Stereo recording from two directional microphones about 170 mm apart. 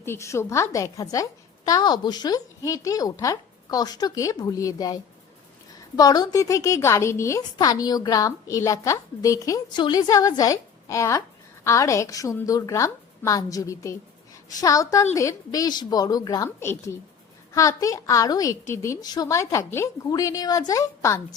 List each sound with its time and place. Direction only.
0.0 s a woman's voice: 15° left (ahead or behind)
6.0 s a woman's voice: 20° left (ahead or behind)